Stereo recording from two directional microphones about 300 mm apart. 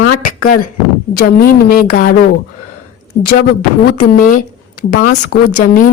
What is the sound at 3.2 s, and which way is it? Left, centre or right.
A woman's voice, left.